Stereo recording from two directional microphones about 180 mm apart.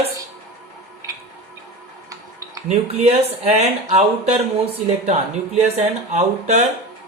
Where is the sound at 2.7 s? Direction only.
40° right (ahead or behind).